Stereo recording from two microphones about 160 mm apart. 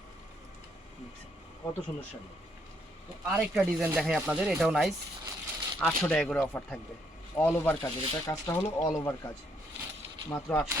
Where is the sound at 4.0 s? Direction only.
5° right (ahead or behind); by 9.2 s 20° left (ahead or behind).